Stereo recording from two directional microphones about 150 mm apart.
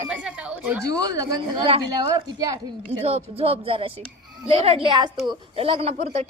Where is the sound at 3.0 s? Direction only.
45° right (ahead or behind).